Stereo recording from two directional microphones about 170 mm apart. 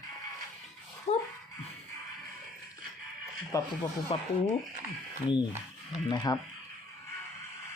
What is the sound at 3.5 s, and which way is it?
Speech, 20° left (ahead or behind).